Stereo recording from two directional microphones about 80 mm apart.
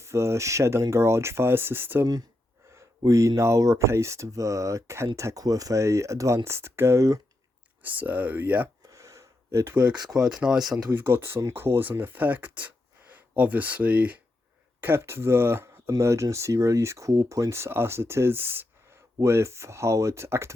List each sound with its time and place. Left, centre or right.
0.0 s speech: right
3.1 s speech: right
7.8 s speech: right
8.9 s gasp: right
10.1 s speech: centre
10.9 s speech: right